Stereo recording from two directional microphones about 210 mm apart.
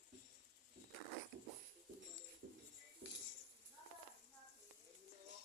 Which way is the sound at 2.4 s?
55° right (ahead or behind).